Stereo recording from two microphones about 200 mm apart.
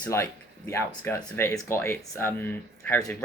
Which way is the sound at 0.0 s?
15° left (ahead or behind).